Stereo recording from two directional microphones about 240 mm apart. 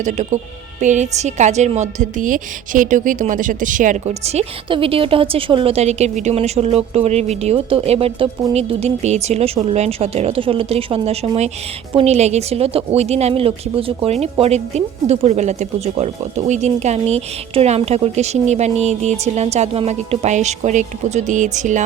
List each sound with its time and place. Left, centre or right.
0.0 s a woman's voice: right